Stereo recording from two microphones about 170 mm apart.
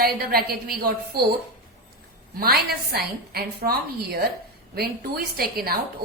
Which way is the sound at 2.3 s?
65° right (ahead or behind).